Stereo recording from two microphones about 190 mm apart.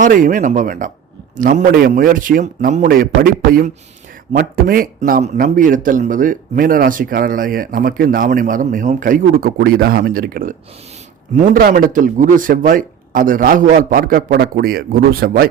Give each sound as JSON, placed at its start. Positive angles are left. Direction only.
{"t": 0.0, "sound": "speech", "side_deg": -45}